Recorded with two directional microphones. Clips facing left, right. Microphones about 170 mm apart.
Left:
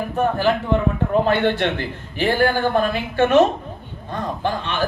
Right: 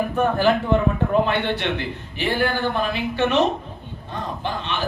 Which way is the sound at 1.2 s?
50° left (ahead or behind).